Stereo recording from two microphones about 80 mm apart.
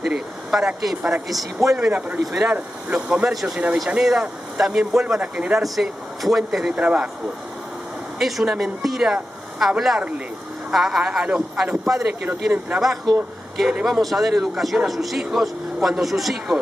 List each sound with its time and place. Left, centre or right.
0.0 s a sound: centre
1.3 s speech: centre
1.9 s speech: centre
8.2 s speech: centre
12.1 s speech: centre
12.8 s speech: centre